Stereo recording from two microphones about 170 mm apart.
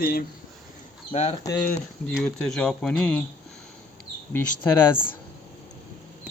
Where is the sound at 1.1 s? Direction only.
35° left (ahead or behind).